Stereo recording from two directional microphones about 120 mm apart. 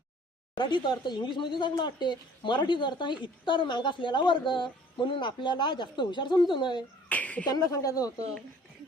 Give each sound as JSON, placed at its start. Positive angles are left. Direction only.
{"t": 0.5, "sound": "a woman's voice", "side_deg": 40}
{"t": 7.1, "sound": "a sound", "side_deg": 10}
{"t": 7.4, "sound": "a woman's voice", "side_deg": 30}